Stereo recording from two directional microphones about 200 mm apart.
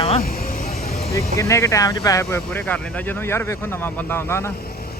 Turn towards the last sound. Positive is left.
turn(degrees=10)  # may be behind; listen again after turning